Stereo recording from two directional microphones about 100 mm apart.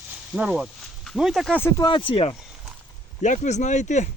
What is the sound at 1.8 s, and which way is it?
Speech, 55° left (ahead or behind).